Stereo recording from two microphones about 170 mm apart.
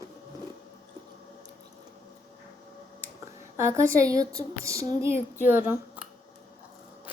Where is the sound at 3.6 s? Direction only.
15° right (ahead or behind).